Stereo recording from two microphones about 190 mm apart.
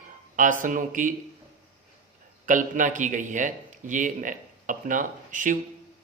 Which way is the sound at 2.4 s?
40° right (ahead or behind).